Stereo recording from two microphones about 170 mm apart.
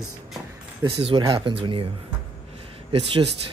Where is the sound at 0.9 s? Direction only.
30° right (ahead or behind).